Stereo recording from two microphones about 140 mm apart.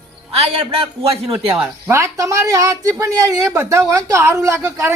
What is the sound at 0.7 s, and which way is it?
Speech, 45° right (ahead or behind).